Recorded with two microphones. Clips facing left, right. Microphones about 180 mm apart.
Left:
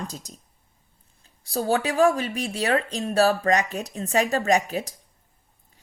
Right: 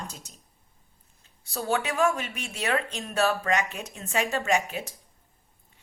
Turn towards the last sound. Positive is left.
turn(degrees=35)  # may be behind; listen again after turning